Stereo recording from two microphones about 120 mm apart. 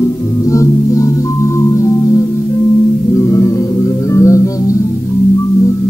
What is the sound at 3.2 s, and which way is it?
Music, 25° left (ahead or behind).